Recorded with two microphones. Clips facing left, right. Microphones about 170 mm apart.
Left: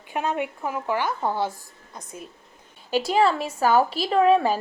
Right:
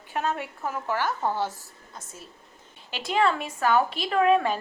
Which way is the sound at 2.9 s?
35° left (ahead or behind).